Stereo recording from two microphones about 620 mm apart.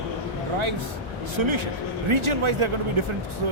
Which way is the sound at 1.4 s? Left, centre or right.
Right.